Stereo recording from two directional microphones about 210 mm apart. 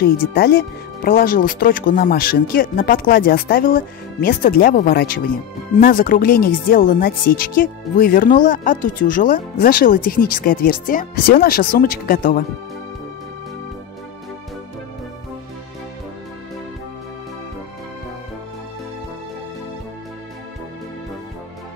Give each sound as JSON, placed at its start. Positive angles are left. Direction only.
{"t": 0.0, "sound": "speech", "side_deg": 45}